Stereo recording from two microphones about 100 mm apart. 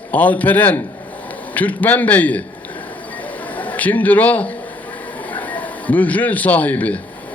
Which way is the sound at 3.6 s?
15° left (ahead or behind).